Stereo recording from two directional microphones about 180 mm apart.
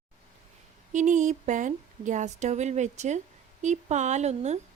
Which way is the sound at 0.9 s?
45° right (ahead or behind).